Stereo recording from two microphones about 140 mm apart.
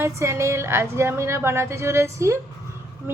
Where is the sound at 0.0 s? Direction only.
20° right (ahead or behind).